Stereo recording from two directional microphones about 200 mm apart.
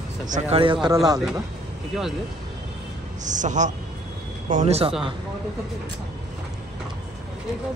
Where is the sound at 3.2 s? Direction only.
40° right (ahead or behind).